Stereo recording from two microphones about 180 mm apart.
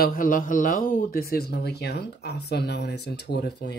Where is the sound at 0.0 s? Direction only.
50° left (ahead or behind).